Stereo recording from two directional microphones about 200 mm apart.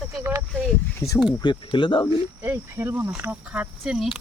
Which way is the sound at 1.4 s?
25° left (ahead or behind).